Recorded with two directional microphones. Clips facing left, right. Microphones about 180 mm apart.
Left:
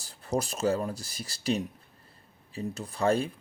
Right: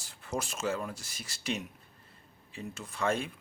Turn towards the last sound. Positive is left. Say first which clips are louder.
# left 5 dB
turn(degrees=35)  # may be behind; listen again after turning